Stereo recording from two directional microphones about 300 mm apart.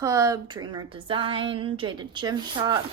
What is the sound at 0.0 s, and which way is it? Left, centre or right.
A woman's voice, centre.